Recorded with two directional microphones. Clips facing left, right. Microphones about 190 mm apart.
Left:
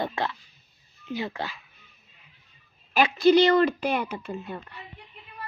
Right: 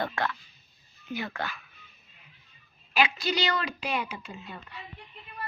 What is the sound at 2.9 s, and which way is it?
Speech, 50° left (ahead or behind).